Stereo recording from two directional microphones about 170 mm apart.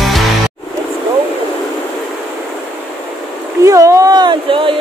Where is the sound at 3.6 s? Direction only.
20° right (ahead or behind).